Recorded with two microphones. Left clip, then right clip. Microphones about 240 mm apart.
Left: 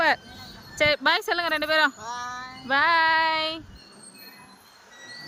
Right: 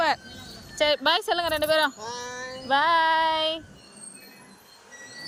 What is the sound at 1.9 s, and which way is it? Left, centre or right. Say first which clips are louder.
Speech: left 1 dB; centre.